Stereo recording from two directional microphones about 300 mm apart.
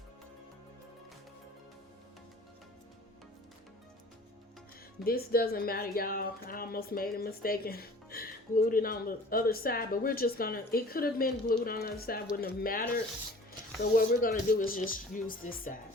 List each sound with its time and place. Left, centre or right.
5.0 s a woman's voice: left
13.9 s a woman's voice: left